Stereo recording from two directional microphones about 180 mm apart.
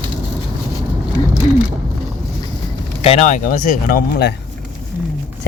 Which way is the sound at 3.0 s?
35° left (ahead or behind).